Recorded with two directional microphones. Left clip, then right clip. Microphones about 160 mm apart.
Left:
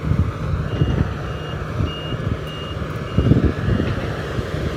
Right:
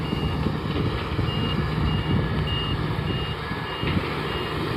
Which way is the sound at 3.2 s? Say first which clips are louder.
Left 9 dB; 50° right (ahead or behind).